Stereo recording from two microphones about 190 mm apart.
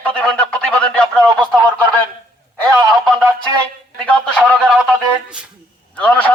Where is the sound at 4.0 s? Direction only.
5° left (ahead or behind).